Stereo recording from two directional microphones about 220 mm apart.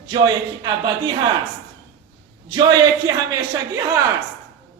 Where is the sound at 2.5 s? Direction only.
15° right (ahead or behind).